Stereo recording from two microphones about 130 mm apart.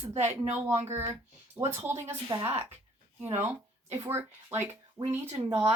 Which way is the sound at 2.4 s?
50° right (ahead or behind).